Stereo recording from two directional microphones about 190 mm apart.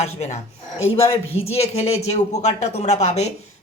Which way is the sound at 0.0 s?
35° left (ahead or behind).